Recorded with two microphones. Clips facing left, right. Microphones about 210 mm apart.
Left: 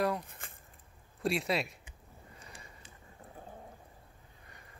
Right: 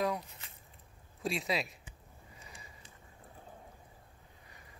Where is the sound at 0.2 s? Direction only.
50° left (ahead or behind).